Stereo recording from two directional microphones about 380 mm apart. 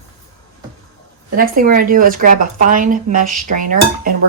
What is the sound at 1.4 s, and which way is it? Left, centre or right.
Speech, right.